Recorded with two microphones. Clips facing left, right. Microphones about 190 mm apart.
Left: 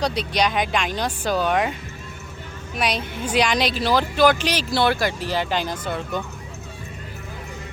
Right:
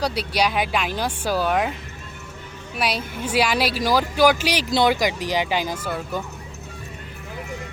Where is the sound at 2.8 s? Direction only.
5° right (ahead or behind).